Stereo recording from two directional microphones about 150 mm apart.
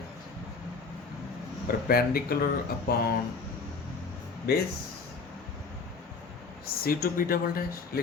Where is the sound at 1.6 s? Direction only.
85° left.